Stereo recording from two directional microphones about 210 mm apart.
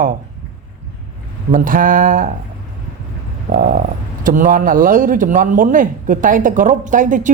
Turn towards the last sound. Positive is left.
turn(degrees=-40)  # may be behind; listen again after turning